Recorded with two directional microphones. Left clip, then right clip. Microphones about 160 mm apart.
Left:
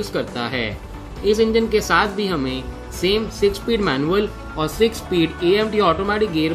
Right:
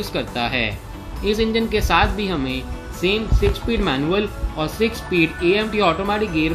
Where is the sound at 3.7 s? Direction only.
20° left (ahead or behind).